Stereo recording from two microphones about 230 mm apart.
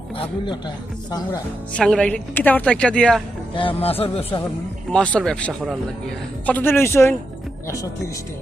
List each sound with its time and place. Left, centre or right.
0.2 s speech: left
1.7 s speech: centre
3.5 s speech: left
4.9 s speech: centre